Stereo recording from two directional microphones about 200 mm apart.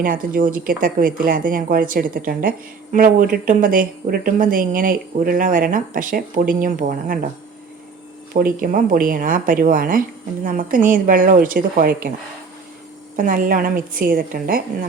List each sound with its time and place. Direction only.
0.0 s speech: 45° right (ahead or behind)
8.3 s speech: 45° right (ahead or behind)
13.1 s speech: 45° right (ahead or behind)